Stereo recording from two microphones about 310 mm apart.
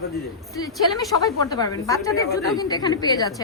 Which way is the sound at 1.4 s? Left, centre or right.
Centre.